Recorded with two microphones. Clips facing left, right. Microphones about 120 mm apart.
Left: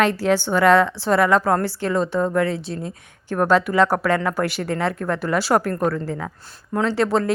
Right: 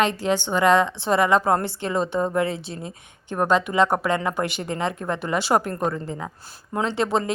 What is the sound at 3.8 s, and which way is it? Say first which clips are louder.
Speech: left 2 dB; 20° right (ahead or behind).